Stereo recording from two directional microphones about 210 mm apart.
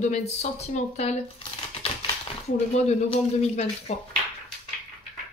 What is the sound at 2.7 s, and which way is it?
Speech, 30° left (ahead or behind).